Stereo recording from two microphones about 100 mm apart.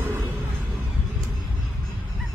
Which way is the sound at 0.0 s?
25° right (ahead or behind).